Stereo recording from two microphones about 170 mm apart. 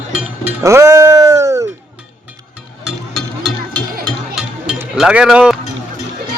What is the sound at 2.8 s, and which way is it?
Music, centre (ahead or behind).